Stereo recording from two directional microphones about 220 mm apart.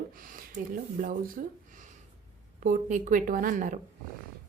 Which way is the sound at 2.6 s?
35° right (ahead or behind).